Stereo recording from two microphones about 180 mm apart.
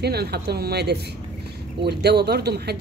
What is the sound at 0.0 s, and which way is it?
A woman's voice, 65° right (ahead or behind).